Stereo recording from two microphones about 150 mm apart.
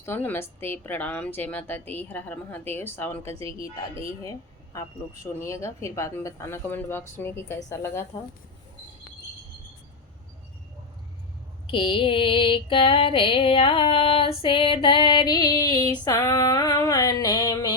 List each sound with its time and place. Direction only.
0.0 s a woman's voice: 15° left (ahead or behind)
11.6 s female singing: 35° left (ahead or behind)